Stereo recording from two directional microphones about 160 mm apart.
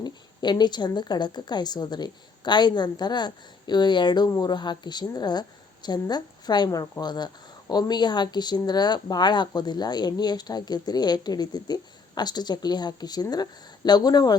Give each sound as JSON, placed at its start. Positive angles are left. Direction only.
{"t": 0.0, "sound": "speech", "side_deg": 25}